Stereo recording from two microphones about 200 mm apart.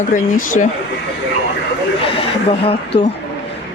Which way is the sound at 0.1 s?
40° left (ahead or behind).